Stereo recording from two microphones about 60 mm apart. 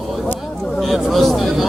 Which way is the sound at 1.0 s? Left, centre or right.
Centre.